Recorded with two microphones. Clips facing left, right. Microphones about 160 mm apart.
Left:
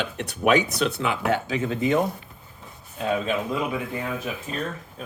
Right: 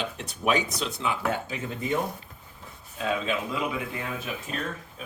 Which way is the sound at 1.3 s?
90° left.